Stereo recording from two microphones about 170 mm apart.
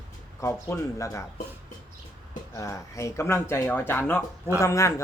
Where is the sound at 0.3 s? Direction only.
15° left (ahead or behind).